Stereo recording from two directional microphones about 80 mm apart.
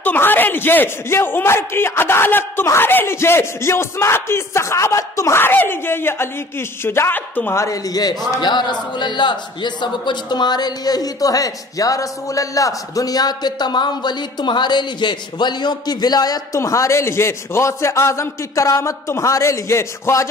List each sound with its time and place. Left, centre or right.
0.0 s a man's voice: left
5.4 s a man's voice: left
7.5 s speech: left
8.4 s a man's voice: left
16.5 s a man's voice: left